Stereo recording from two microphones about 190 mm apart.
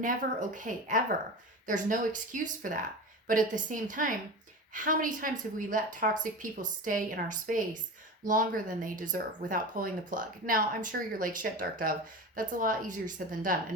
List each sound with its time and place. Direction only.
0.0 s speech: 45° right (ahead or behind)